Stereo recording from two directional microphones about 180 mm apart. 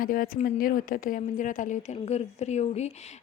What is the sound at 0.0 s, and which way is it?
A woman's voice, 55° left (ahead or behind).